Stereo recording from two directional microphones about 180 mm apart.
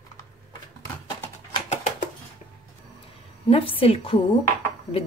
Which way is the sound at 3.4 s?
30° left (ahead or behind).